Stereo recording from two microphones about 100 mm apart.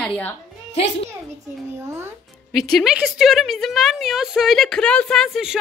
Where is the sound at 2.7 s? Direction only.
Centre (ahead or behind).